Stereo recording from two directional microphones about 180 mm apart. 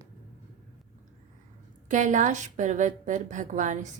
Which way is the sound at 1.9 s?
45° right (ahead or behind).